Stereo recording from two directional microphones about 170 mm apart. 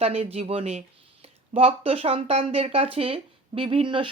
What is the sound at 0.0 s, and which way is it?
Speech, 35° right (ahead or behind).